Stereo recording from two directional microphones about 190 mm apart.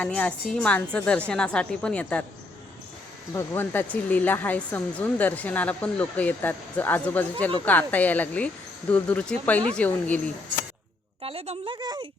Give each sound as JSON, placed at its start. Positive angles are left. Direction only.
{"t": 0.0, "sound": "a woman's voice", "side_deg": 5}
{"t": 3.3, "sound": "speech", "side_deg": 10}
{"t": 11.2, "sound": "a woman's voice", "side_deg": -30}